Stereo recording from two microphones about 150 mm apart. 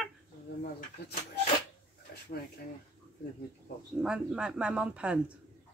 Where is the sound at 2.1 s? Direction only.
85° left.